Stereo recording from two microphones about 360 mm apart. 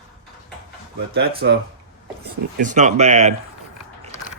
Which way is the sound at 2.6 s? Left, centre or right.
Right.